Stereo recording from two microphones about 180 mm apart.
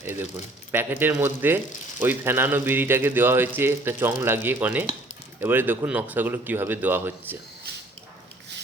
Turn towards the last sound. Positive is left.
turn(degrees=-10)  # may be behind; listen again after turning